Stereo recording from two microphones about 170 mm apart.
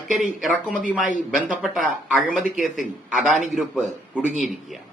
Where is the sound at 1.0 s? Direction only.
50° right (ahead or behind).